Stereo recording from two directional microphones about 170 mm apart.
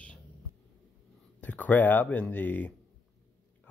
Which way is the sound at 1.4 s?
10° left (ahead or behind).